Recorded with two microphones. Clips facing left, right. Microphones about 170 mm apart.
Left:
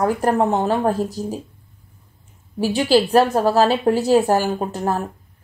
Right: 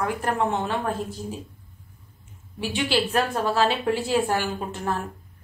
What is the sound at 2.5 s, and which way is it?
Speech, 40° left (ahead or behind).